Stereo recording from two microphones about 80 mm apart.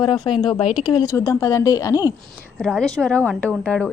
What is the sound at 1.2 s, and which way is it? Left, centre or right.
Speech, left.